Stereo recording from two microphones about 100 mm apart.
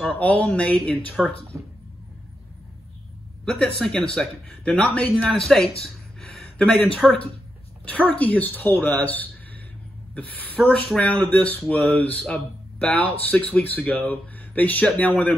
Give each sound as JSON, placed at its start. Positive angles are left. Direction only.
{"t": 0.1, "sound": "speech", "side_deg": 15}
{"t": 1.5, "sound": "speech", "side_deg": -30}
{"t": 3.4, "sound": "speech", "side_deg": 10}
{"t": 6.3, "sound": "a sound", "side_deg": 10}
{"t": 7.8, "sound": "a woman's voice", "side_deg": 15}